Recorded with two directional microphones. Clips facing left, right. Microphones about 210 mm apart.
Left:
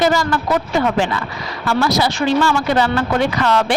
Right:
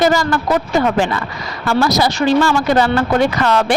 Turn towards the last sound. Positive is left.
turn(degrees=-45)  # may be behind; listen again after turning